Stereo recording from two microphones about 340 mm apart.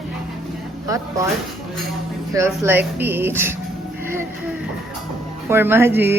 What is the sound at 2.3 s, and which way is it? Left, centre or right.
Speech, centre.